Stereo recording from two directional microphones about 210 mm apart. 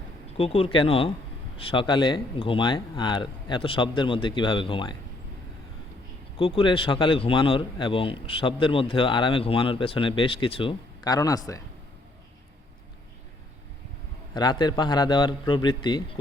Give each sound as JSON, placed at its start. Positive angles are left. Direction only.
{"t": 0.3, "sound": "a man's voice", "side_deg": 25}
{"t": 6.4, "sound": "a man's voice", "side_deg": 25}
{"t": 14.3, "sound": "a man's voice", "side_deg": 20}